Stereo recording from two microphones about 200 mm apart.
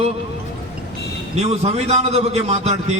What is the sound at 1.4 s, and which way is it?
A man's voice, 30° right (ahead or behind).